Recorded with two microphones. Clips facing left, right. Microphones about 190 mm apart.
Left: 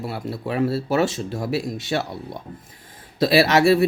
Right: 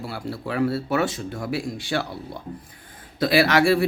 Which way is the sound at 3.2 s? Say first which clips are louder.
Left 2 dB; 25° left (ahead or behind).